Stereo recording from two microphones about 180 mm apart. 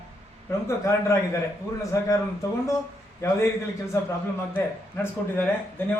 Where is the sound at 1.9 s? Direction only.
15° left (ahead or behind).